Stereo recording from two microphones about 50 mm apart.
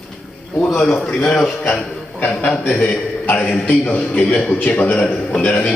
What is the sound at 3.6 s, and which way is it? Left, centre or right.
A man's voice, left.